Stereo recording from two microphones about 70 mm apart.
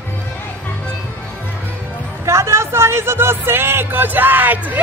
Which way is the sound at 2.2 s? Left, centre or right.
Right.